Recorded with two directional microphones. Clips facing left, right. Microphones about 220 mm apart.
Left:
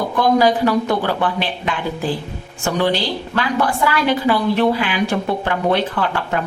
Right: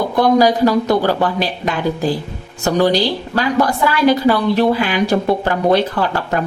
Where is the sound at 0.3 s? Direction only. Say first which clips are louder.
Right 2 dB; 40° right (ahead or behind).